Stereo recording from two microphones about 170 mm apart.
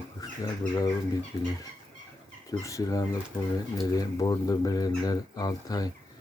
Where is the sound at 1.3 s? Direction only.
25° left (ahead or behind).